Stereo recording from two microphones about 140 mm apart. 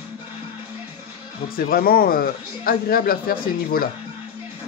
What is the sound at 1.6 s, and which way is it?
A man's voice, 90° left.